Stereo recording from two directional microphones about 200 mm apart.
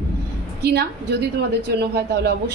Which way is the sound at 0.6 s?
55° right (ahead or behind).